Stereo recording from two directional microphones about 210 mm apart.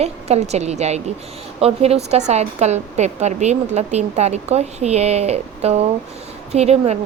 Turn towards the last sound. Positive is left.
turn(degrees=-30)  # may be behind; listen again after turning